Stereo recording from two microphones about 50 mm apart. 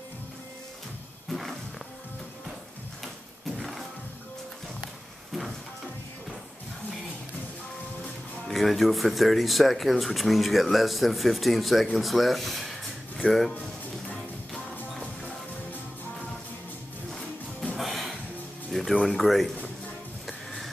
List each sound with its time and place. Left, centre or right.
3.5 s music: centre
8.5 s speech: centre
17.7 s music: centre
18.9 s speech: centre
20.2 s music: centre